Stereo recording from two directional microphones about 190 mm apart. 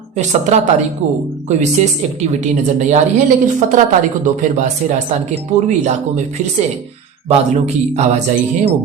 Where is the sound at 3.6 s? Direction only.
40° right (ahead or behind).